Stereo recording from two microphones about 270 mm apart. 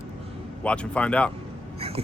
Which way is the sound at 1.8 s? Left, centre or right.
Right.